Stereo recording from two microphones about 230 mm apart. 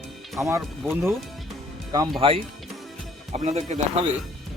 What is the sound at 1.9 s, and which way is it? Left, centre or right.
Speech, centre.